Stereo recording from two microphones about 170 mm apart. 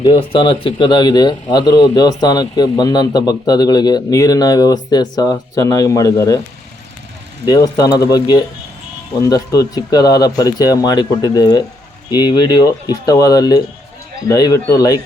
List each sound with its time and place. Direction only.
0.0 s speech: 30° left (ahead or behind)
7.4 s speech: 25° left (ahead or behind)